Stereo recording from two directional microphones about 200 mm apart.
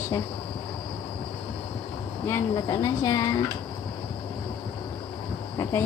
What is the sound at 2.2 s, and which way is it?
Speech, 15° left (ahead or behind).